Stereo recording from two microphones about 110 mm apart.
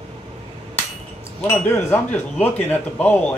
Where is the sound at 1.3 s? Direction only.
20° left (ahead or behind).